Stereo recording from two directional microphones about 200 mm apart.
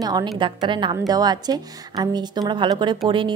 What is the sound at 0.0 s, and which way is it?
A woman's voice, 20° right (ahead or behind).